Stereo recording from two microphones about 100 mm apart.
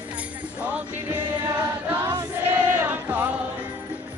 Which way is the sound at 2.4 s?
20° right (ahead or behind).